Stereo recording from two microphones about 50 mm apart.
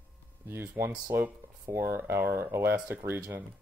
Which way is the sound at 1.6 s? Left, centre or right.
Right.